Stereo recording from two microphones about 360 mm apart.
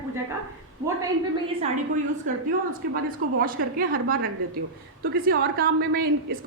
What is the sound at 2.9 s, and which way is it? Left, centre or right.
A woman's voice, right.